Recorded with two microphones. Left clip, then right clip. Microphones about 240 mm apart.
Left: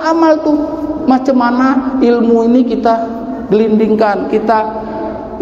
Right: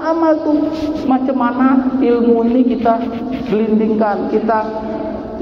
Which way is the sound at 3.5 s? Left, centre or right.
Left.